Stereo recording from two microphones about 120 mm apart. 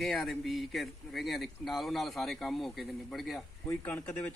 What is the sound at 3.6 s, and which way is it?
Speech, 15° left (ahead or behind).